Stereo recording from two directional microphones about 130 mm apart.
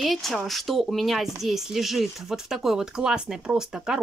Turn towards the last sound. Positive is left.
turn(degrees=-5)  # may be behind; listen again after turning